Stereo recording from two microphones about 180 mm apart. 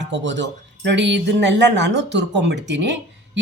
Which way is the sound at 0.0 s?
80° right.